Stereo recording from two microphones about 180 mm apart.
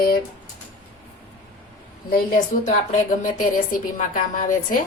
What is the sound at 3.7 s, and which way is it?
A woman's voice, 50° left (ahead or behind).